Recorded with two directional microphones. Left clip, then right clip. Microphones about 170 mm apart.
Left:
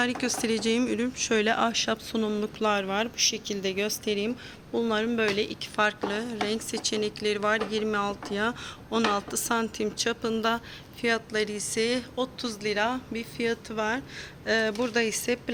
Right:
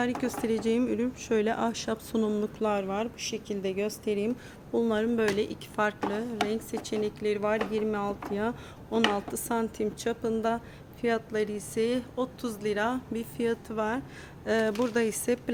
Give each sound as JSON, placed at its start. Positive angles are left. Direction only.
{"t": 0.0, "sound": "speech", "side_deg": 0}
{"t": 2.6, "sound": "speech", "side_deg": 0}
{"t": 4.7, "sound": "a woman's voice", "side_deg": -15}